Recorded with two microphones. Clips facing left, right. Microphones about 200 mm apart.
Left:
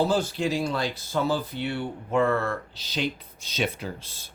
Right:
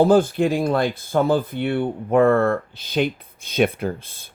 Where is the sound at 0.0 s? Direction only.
55° right (ahead or behind).